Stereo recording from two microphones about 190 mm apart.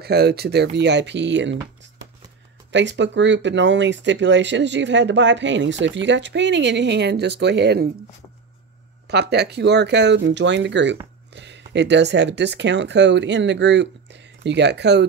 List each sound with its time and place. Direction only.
0.0 s speech: 60° right (ahead or behind)
2.7 s speech: 70° right (ahead or behind)
9.0 s speech: 60° right (ahead or behind)